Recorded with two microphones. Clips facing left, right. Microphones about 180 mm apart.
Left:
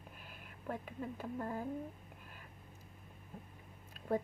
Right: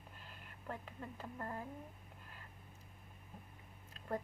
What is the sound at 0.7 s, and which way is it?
Speech, 5° left (ahead or behind).